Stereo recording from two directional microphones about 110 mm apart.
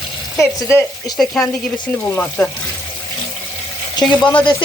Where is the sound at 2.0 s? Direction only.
15° left (ahead or behind).